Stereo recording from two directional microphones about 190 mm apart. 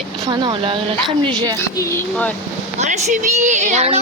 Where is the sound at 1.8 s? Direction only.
15° left (ahead or behind).